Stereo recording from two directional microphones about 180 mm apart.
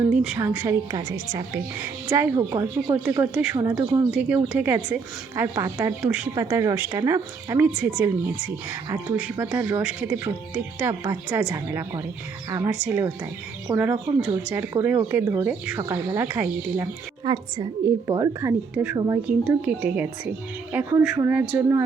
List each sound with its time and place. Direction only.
0.1 s speech: 5° right (ahead or behind)
17.2 s a woman's voice: 25° right (ahead or behind)
18.7 s speech: 5° right (ahead or behind)
18.9 s a woman's voice: 20° right (ahead or behind)